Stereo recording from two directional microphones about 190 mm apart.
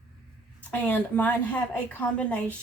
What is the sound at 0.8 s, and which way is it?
A woman's voice, 10° left (ahead or behind).